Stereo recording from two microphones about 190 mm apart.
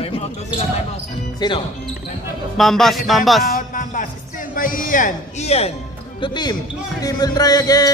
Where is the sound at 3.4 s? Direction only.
45° left (ahead or behind).